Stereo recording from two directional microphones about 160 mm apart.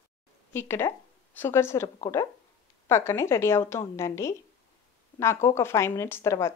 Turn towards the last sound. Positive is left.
turn(degrees=15)  # may be behind; listen again after turning